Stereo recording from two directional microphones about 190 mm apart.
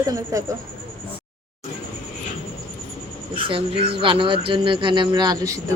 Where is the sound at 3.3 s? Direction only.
30° right (ahead or behind).